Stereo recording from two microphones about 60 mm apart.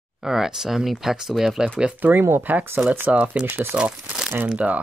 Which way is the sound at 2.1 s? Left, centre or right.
Right.